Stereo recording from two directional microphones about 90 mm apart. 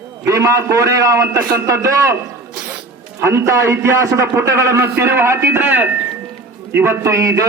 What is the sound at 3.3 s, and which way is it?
A man's voice, 30° right (ahead or behind).